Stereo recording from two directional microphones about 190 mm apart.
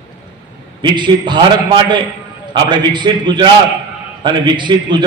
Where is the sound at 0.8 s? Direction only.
25° right (ahead or behind).